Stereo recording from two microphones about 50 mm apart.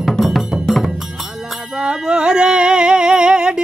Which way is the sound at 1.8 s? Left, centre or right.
Centre.